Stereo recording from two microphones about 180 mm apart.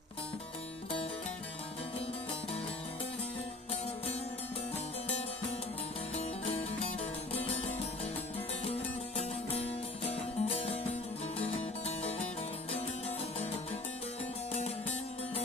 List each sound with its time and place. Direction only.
6.1 s music: 35° left (ahead or behind)
8.7 s music: 35° left (ahead or behind)
11.9 s music: 35° left (ahead or behind)
14.5 s music: 35° left (ahead or behind)